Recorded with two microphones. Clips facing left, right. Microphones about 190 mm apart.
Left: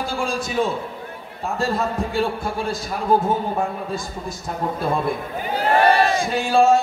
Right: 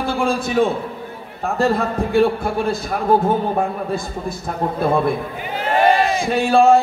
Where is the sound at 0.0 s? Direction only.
60° right (ahead or behind).